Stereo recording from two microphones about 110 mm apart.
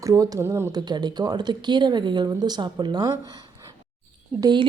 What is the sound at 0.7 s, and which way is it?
Speech, 40° right (ahead or behind).